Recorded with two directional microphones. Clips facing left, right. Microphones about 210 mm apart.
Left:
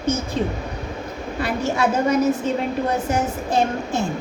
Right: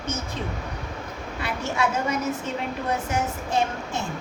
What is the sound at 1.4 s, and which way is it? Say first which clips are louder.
A woman's voice: left 5 dB; 35° left (ahead or behind).